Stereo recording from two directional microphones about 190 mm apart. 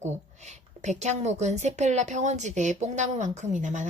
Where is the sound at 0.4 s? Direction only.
40° right (ahead or behind).